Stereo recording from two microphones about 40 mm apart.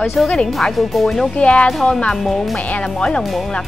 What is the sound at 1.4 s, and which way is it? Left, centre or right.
Speech, left.